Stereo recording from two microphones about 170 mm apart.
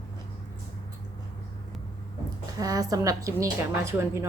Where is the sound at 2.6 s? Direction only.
20° right (ahead or behind).